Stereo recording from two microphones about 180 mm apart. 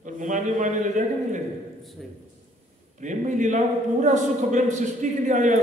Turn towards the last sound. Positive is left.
turn(degrees=-45)  # may be behind; listen again after turning